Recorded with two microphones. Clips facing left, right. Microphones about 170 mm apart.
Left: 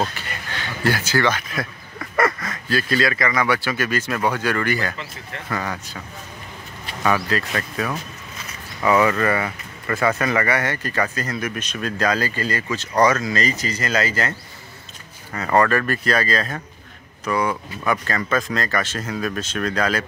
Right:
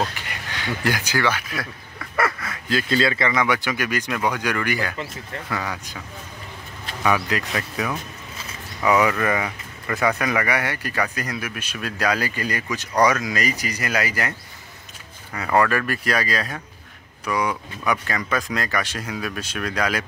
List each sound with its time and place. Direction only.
0.1 s speech: 15° right (ahead or behind)
2.1 s duck: 5° right (ahead or behind)
2.7 s speech: 20° right (ahead or behind)
15.3 s speech: 5° right (ahead or behind)